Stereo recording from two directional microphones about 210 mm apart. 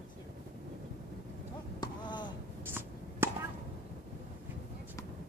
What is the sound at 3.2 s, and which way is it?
Chop, 10° right (ahead or behind).